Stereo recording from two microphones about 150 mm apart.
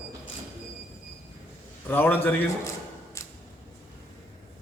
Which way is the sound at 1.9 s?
15° left (ahead or behind).